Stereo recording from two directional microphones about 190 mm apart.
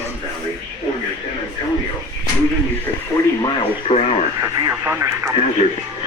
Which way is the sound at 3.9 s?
35° left (ahead or behind).